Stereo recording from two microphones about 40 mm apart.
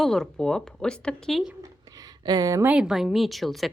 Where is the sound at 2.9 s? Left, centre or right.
Centre.